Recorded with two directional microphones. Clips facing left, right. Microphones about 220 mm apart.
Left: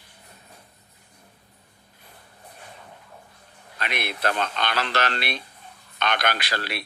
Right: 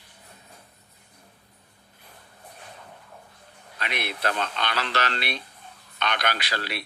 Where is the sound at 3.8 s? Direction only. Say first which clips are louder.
Left 2 dB; 50° left (ahead or behind).